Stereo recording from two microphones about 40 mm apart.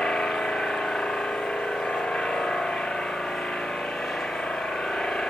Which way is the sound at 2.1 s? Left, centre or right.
Centre.